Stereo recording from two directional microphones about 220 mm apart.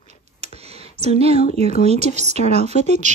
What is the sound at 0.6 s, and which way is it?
Speech, 25° right (ahead or behind).